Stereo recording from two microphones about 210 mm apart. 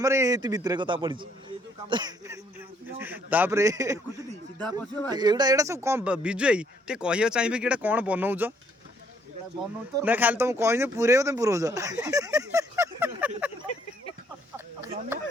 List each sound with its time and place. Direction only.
0.0 s speech: 15° right (ahead or behind)
4.5 s speech: 5° left (ahead or behind)
5.1 s speech: 20° right (ahead or behind)
10.0 s speech: 10° right (ahead or behind)
14.5 s a sound: 10° right (ahead or behind)